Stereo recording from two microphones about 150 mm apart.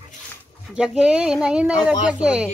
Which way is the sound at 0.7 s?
5° right (ahead or behind).